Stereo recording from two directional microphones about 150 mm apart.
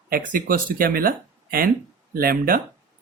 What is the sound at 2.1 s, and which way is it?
Speech, 75° right (ahead or behind).